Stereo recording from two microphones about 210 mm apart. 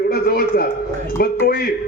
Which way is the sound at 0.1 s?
45° left (ahead or behind).